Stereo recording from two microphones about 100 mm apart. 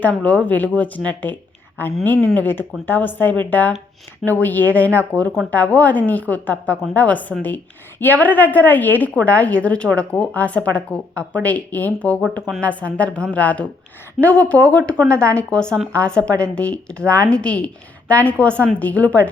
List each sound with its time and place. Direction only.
0.0 s a woman's voice: 15° left (ahead or behind)